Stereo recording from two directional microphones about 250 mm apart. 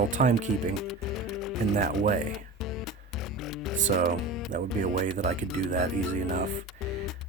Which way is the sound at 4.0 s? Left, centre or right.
Right.